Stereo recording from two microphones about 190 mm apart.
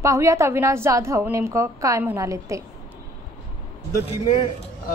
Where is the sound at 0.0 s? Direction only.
15° right (ahead or behind).